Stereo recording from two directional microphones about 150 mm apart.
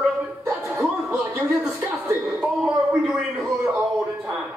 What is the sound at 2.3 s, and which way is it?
Speech, 5° right (ahead or behind).